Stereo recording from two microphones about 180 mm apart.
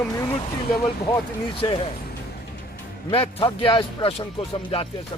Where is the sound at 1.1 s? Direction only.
30° left (ahead or behind).